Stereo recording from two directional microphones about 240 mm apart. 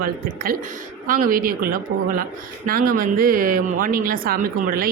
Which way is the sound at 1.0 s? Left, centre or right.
Right.